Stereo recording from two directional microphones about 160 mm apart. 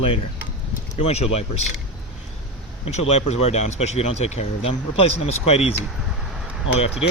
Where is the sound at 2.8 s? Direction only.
40° left (ahead or behind).